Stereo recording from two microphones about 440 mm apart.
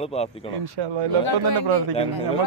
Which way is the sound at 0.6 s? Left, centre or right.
Right.